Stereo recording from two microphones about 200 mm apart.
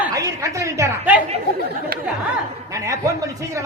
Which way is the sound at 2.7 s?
15° right (ahead or behind).